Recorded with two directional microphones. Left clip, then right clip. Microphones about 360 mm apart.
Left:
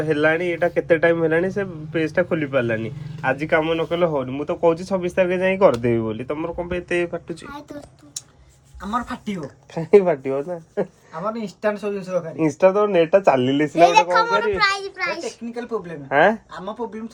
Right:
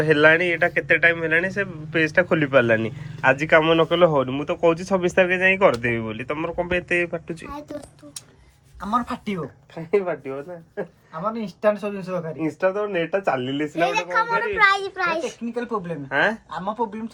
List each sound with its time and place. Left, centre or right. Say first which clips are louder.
0.0 s speech: right 3 dB; centre
8.9 s speech: right 2 dB; centre
9.7 s a child's voice: left 8 dB; left
11.1 s speech: left 1 dB; centre
12.4 s a child's voice: left 7 dB; left
14.6 s speech: right 2 dB; centre
16.0 s speech: left 5 dB; centre